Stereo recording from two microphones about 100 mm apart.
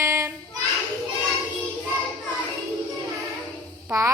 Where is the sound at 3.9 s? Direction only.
30° right (ahead or behind).